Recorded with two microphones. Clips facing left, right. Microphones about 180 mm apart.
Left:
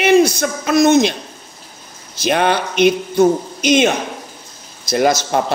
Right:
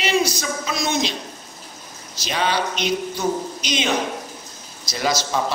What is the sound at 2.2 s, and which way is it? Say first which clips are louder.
Speech: left 7 dB; 55° left (ahead or behind).